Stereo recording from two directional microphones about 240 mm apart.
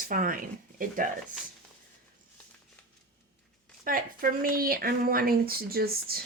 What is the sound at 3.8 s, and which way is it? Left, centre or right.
Speech, right.